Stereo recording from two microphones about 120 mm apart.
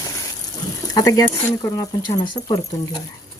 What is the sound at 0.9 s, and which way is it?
Speech, 30° left (ahead or behind).